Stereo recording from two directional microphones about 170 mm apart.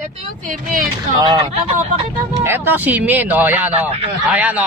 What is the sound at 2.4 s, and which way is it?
A man's voice, 15° right (ahead or behind).